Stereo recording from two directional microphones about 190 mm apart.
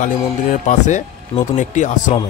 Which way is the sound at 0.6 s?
40° left (ahead or behind).